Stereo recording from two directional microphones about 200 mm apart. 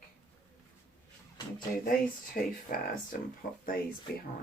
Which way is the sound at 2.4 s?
45° left (ahead or behind).